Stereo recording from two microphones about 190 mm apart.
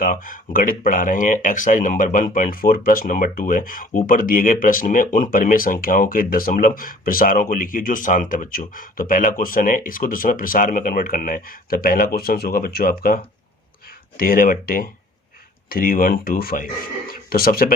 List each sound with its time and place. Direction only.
0.0 s speech: 45° left (ahead or behind)